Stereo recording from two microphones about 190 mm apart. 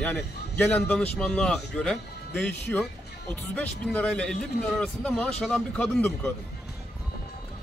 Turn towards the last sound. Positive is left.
turn(degrees=10)  # may be behind; listen again after turning